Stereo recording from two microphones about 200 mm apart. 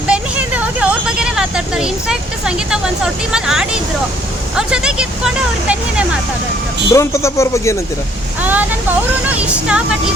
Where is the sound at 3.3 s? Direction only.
5° right (ahead or behind).